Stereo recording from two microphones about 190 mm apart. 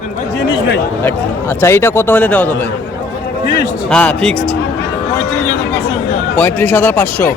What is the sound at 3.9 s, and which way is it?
Speech, 5° left (ahead or behind).